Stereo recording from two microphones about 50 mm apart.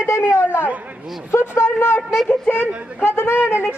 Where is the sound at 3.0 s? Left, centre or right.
Left.